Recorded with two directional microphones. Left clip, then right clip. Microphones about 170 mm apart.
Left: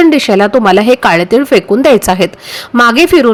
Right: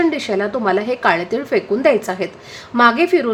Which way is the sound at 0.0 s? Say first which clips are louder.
Left 11 dB; 45° left (ahead or behind).